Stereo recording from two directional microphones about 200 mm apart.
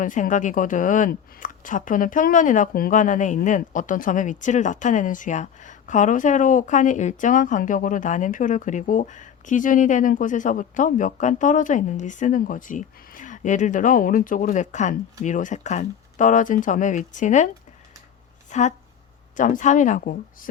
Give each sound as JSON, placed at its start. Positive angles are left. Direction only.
{"t": 0.0, "sound": "a woman's voice", "side_deg": 40}
{"t": 18.5, "sound": "a woman's voice", "side_deg": 35}